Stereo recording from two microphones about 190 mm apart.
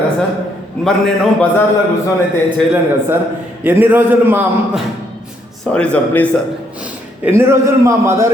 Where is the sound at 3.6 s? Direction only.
10° right (ahead or behind).